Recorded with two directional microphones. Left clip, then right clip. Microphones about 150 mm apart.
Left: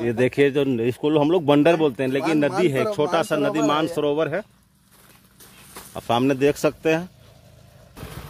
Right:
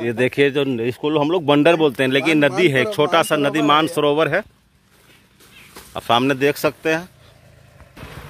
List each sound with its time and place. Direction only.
0.0 s speech: 15° left (ahead or behind)
0.9 s speech: 35° left (ahead or behind)
1.6 s speech: 5° right (ahead or behind); by 4.5 s 25° right (ahead or behind)
5.9 s speech: 15° left (ahead or behind)
6.5 s speech: 30° left (ahead or behind)